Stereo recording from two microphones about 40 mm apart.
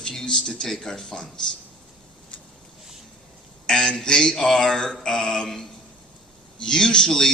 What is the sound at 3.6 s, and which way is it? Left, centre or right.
A man's voice, centre.